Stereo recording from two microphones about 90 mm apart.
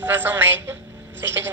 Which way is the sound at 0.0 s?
20° right (ahead or behind).